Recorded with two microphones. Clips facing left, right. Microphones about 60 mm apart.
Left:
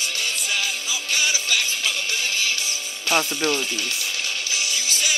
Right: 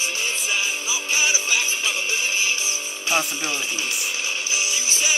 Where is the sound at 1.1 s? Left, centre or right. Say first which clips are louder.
Right 1 dB; centre.